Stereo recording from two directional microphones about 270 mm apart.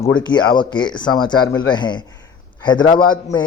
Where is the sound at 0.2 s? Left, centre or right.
Centre.